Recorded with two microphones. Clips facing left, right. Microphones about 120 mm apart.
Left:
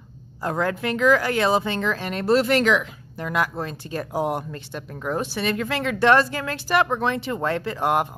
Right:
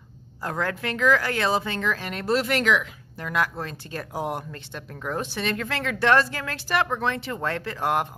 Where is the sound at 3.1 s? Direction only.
20° left (ahead or behind).